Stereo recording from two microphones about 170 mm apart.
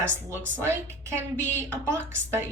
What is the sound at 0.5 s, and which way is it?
A woman's voice, 15° right (ahead or behind).